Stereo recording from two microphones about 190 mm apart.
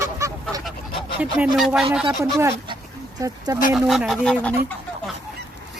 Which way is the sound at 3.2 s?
20° right (ahead or behind).